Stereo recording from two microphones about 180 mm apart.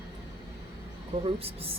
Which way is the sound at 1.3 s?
35° right (ahead or behind).